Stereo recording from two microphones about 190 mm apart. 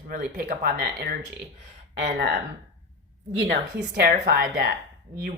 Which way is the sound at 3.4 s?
60° right (ahead or behind).